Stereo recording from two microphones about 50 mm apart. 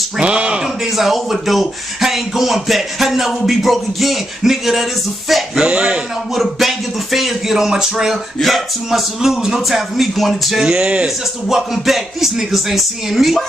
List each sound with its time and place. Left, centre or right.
0.2 s a sound: right
0.9 s speech: centre
5.6 s a man's voice: centre
6.3 s speech: centre
8.1 s speech: centre
10.6 s speech: centre
11.4 s speech: centre